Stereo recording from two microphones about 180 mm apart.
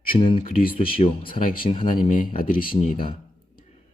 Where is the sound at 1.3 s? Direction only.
50° left (ahead or behind).